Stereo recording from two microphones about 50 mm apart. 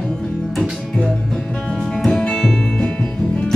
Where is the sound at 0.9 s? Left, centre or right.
Centre.